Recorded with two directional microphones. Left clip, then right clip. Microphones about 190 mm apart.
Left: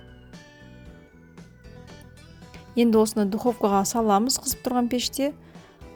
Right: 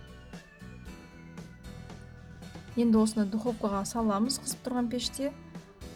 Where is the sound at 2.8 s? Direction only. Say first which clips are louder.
Left 7 dB; 40° left (ahead or behind).